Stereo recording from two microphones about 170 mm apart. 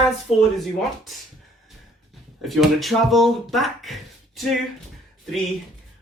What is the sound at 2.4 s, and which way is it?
Speech, centre (ahead or behind).